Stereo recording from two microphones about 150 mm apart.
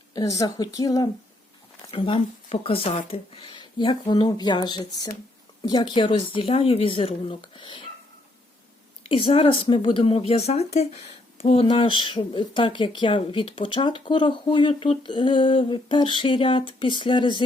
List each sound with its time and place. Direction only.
0.1 s speech: 25° left (ahead or behind)
1.9 s speech: 35° left (ahead or behind)
9.0 s speech: 35° left (ahead or behind)